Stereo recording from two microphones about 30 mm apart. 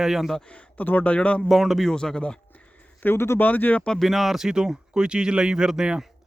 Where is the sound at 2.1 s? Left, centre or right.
Left.